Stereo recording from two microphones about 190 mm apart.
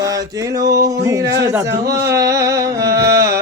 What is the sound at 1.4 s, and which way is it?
Speech, 15° right (ahead or behind).